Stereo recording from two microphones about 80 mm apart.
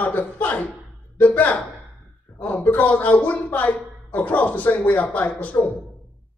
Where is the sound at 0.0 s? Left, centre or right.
Left.